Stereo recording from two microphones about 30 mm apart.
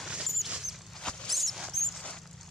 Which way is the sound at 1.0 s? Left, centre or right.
Left.